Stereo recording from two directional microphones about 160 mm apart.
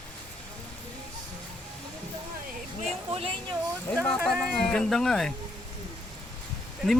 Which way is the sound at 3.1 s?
35° right (ahead or behind).